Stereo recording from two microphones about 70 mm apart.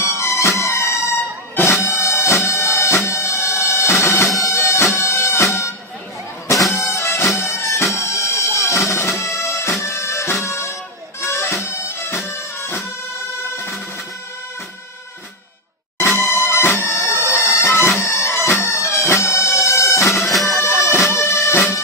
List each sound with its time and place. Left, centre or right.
0.0 s music: left
7.3 s bagpipes: left
9.8 s music: left
11.2 s bagpipes: left
16.0 s music: left
17.4 s bagpipes: left
20.1 s bagpipes: centre
20.6 s bagpipes: left